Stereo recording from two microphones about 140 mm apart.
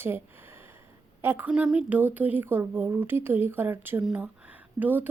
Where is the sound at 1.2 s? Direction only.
15° right (ahead or behind).